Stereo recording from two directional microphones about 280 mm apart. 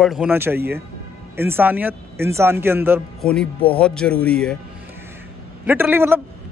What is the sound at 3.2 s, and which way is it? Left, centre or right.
Speech, centre.